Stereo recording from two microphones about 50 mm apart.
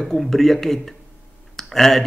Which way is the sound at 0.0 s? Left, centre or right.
Centre.